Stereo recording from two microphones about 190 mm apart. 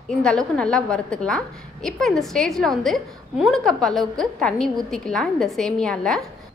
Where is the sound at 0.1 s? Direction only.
5° left (ahead or behind).